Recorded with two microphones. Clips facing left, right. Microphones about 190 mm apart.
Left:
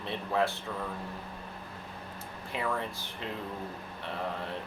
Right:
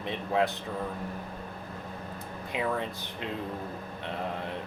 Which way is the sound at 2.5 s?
20° right (ahead or behind).